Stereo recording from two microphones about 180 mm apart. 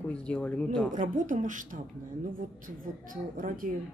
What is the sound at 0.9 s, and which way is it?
Speech, 45° right (ahead or behind).